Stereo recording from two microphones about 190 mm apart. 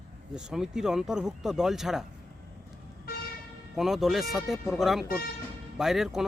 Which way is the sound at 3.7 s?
Centre (ahead or behind).